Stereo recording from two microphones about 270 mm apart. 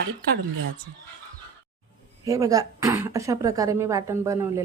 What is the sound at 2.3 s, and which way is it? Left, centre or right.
Speech, centre.